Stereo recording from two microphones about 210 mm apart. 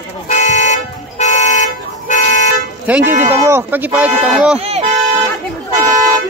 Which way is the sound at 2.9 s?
10° right (ahead or behind).